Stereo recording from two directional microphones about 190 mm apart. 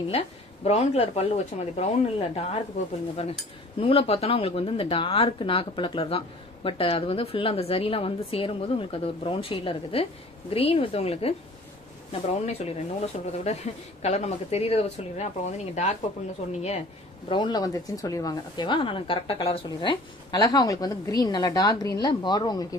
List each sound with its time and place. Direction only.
0.1 s speech: 35° left (ahead or behind)
3.8 s speech: 30° left (ahead or behind)
17.3 s speech: 20° left (ahead or behind)